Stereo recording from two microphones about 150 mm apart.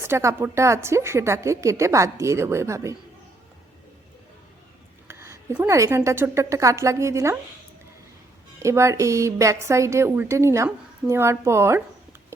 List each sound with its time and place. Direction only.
0.0 s a woman's voice: 15° right (ahead or behind)
5.2 s a sound: 20° right (ahead or behind)
5.6 s a woman's voice: 20° right (ahead or behind)
8.5 s a woman's voice: 20° right (ahead or behind)